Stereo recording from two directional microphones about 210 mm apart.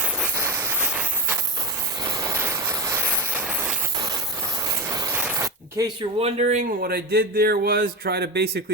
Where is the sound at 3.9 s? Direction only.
15° right (ahead or behind).